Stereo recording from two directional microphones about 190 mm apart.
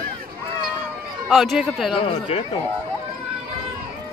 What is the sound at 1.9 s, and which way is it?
Speech, 30° left (ahead or behind).